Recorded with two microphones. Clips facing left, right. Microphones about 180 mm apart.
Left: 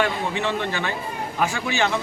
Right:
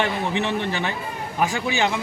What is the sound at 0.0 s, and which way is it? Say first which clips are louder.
A man's voice: even; 20° right (ahead or behind).